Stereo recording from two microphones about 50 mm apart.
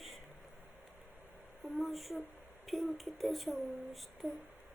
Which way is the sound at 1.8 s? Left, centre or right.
Centre.